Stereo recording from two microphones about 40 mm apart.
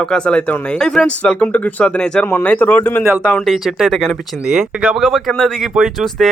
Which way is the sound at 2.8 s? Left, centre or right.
Left.